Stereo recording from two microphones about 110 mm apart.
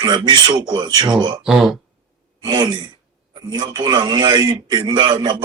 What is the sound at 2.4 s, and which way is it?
Speech, 40° right (ahead or behind).